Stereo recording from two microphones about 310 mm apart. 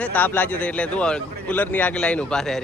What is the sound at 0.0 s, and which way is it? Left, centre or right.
A man's voice, centre.